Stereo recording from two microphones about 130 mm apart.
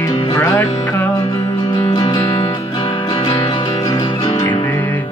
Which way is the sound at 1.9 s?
30° left (ahead or behind).